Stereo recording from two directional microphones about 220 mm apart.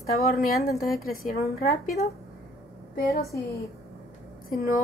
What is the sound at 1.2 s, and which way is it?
Speech, 45° left (ahead or behind).